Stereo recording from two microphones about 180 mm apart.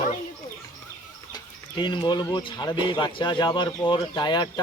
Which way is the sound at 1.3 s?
25° left (ahead or behind).